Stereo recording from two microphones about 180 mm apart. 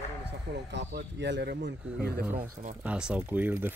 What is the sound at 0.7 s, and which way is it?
Speech, 70° right (ahead or behind).